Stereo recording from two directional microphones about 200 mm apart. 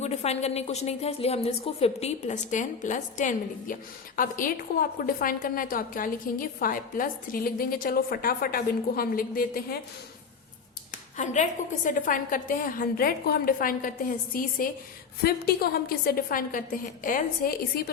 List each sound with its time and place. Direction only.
0.0 s a woman's voice: 35° left (ahead or behind)
11.9 s a woman's voice: 40° left (ahead or behind)